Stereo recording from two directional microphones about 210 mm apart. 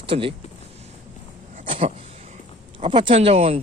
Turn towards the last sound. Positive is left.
turn(degrees=-30)  # may be behind; listen again after turning